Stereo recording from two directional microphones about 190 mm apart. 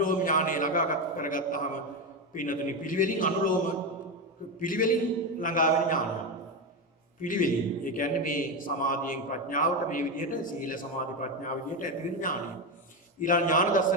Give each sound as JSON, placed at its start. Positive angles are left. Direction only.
{"t": 0.0, "sound": "a man's voice", "side_deg": 45}
{"t": 4.6, "sound": "a man's voice", "side_deg": 45}
{"t": 7.2, "sound": "a man's voice", "side_deg": 45}